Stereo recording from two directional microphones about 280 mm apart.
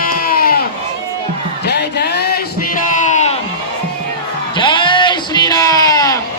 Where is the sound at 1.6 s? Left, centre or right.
Left.